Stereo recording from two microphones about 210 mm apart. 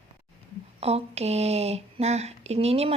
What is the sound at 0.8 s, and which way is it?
A woman's voice, 30° right (ahead or behind).